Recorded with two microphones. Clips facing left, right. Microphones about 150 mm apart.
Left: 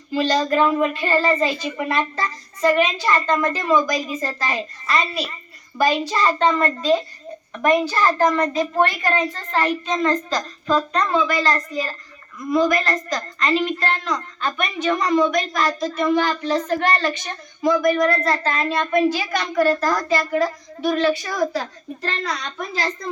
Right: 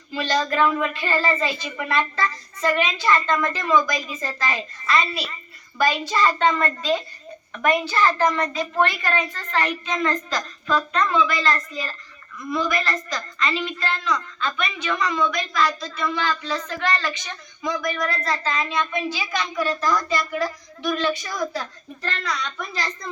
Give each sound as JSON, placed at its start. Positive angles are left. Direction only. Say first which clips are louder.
{"t": 0.1, "sound": "speech", "louder": "left 4 dB", "side_deg": 40}
{"t": 9.5, "sound": "a child's voice", "louder": "left 3 dB", "side_deg": 30}
{"t": 19.4, "sound": "a child's voice", "louder": "left 6 dB", "side_deg": 60}
{"t": 21.3, "sound": "a woman's voice", "louder": "left 5 dB", "side_deg": 30}
{"t": 22.2, "sound": "a child's voice", "louder": "right 2 dB", "side_deg": 50}
{"t": 22.4, "sound": "speech", "louder": "left 4 dB", "side_deg": 40}